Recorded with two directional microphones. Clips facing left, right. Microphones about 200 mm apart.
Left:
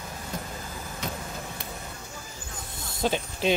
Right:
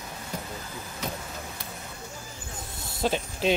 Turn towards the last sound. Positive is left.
turn(degrees=0)  # may be behind; listen again after turning